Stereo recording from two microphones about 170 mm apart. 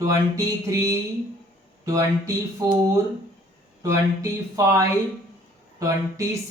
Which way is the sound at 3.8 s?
20° right (ahead or behind).